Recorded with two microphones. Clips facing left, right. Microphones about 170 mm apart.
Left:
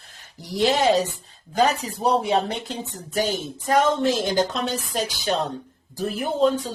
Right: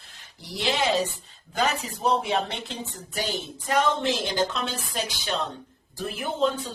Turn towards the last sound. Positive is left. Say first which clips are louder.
# left 5 dB
turn(degrees=40)  # may be behind; listen again after turning